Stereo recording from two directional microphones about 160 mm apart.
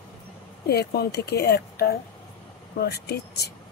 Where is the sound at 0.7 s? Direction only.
85° left.